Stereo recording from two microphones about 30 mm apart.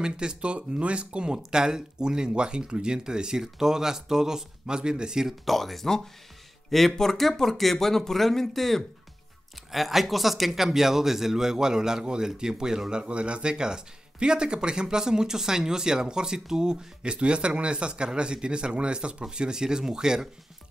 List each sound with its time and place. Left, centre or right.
0.0 s speech: right
5.4 s speech: centre
9.7 s speech: centre
12.9 s speech: right